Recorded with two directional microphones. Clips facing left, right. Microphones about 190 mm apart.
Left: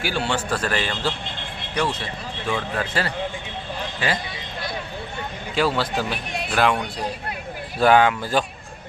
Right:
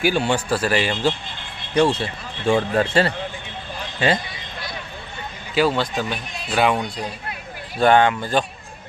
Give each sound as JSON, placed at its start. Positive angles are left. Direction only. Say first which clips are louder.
{"t": 0.0, "sound": "a man's voice", "louder": "right 5 dB", "side_deg": -15}
{"t": 1.7, "sound": "speech", "louder": "right 7 dB", "side_deg": -30}
{"t": 5.5, "sound": "speech", "louder": "right 2 dB", "side_deg": 0}
{"t": 7.8, "sound": "speech", "louder": "right 1 dB", "side_deg": 5}